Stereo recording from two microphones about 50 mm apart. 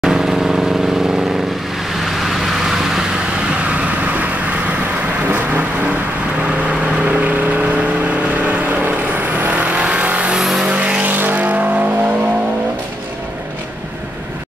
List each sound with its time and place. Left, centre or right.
0.0 s vehicle: centre
2.0 s vehicle: centre
3.6 s vehicle: right
5.3 s vehicle: right
6.7 s vehicle: centre
7.2 s vehicle: right
10.4 s vehicle: centre
10.7 s vehicle: right